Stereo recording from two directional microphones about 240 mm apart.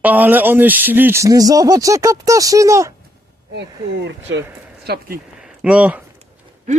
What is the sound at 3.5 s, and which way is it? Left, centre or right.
Speech, right.